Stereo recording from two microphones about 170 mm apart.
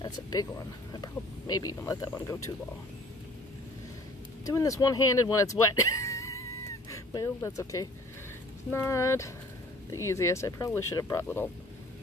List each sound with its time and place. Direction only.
0.0 s speech: 20° left (ahead or behind)
4.5 s speech: 20° left (ahead or behind)